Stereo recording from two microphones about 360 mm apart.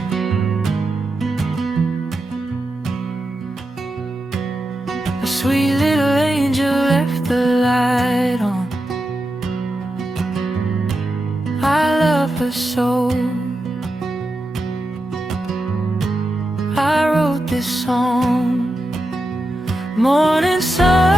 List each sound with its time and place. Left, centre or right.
0.1 s music: centre
4.9 s music: centre
10.2 s music: centre
16.6 s music: centre
20.0 s music: centre